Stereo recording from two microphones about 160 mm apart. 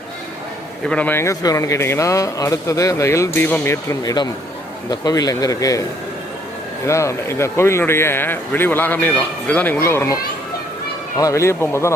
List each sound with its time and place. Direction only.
0.9 s a man's voice: 10° left (ahead or behind)
6.8 s speech: 20° left (ahead or behind)
11.2 s speech: 20° left (ahead or behind)